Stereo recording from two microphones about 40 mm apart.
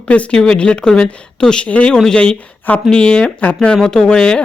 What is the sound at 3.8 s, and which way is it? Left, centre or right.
Speech, centre.